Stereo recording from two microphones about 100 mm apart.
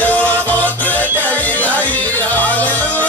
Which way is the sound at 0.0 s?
15° left (ahead or behind).